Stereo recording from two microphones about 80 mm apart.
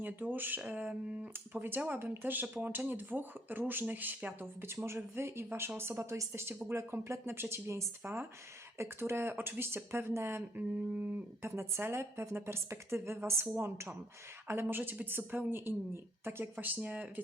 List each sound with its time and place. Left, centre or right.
0.0 s speech: right
10.9 s speech: right
11.4 s speech: right